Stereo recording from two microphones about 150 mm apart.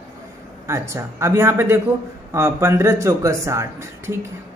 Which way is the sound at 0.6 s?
20° right (ahead or behind).